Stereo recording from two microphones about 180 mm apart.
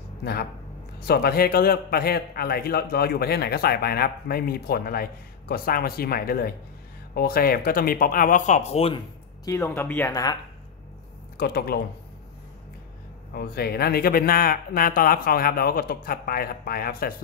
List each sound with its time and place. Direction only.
0.2 s a man's voice: 60° left (ahead or behind); by 9.0 s 35° left (ahead or behind)
9.4 s speech: 20° left (ahead or behind)
11.3 s a man's voice: 60° left (ahead or behind)
13.3 s a man's voice: 60° left (ahead or behind)